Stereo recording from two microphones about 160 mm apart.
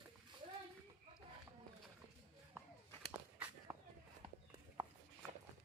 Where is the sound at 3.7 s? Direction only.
15° right (ahead or behind).